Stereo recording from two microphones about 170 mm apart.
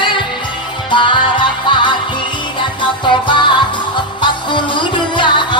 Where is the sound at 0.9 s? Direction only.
30° left (ahead or behind).